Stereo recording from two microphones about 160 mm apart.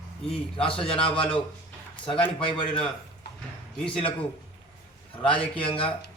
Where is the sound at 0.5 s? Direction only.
35° left (ahead or behind).